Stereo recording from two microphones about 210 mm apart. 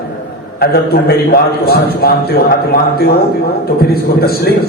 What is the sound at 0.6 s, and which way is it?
A man's voice, 45° left (ahead or behind).